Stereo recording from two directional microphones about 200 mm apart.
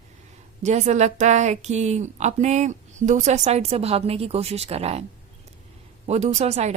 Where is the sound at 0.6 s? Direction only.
35° right (ahead or behind).